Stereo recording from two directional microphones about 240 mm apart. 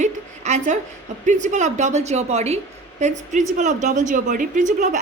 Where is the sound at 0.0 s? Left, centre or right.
Right.